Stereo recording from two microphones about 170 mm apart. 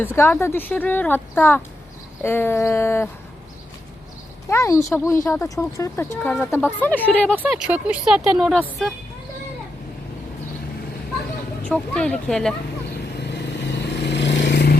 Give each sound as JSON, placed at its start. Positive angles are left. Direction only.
{"t": 0.0, "sound": "speech", "side_deg": 15}
{"t": 4.4, "sound": "speech", "side_deg": 15}
{"t": 7.3, "sound": "speech", "side_deg": -10}
{"t": 11.6, "sound": "speech", "side_deg": 5}
{"t": 13.1, "sound": "vehicle", "side_deg": 80}